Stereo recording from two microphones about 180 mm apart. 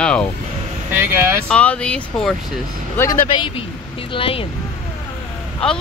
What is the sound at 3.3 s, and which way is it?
A woman's voice, 30° left (ahead or behind).